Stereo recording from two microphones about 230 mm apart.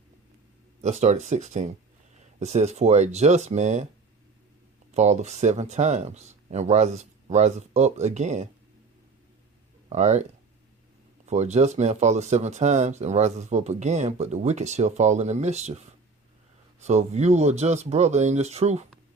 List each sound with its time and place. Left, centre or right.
0.8 s speech: right
4.9 s speech: right
9.9 s speech: right
11.3 s speech: right
16.8 s speech: right